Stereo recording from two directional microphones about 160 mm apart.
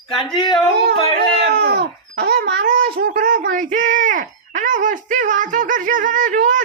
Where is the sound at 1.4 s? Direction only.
85° right.